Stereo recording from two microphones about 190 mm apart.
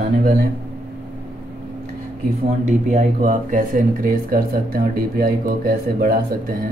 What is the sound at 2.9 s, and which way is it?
Speech, 40° right (ahead or behind).